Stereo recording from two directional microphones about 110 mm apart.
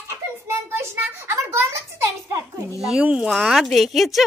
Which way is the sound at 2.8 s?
10° right (ahead or behind).